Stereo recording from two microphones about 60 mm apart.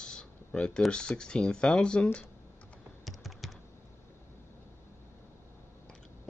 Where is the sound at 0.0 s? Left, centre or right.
Centre.